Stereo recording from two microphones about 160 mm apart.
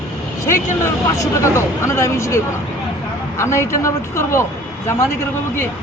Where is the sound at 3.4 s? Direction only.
15° left (ahead or behind).